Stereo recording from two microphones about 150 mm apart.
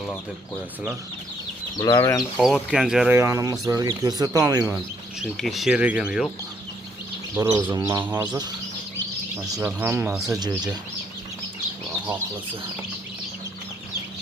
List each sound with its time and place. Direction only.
1.8 s speech: 25° left (ahead or behind)
2.4 s speech: 5° right (ahead or behind)
3.1 s speech: 15° right (ahead or behind)
5.2 s speech: centre (ahead or behind)
7.3 s speech: 20° right (ahead or behind)
9.6 s speech: 15° right (ahead or behind)